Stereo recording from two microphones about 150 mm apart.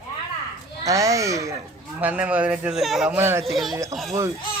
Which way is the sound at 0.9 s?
20° right (ahead or behind).